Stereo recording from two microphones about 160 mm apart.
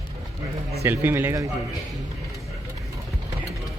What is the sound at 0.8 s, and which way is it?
Speech, 15° right (ahead or behind).